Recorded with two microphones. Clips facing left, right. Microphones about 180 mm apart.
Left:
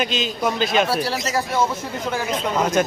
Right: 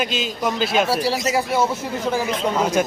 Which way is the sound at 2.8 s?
5° right (ahead or behind).